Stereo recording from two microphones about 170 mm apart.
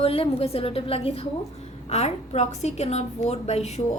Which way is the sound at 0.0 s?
35° left (ahead or behind).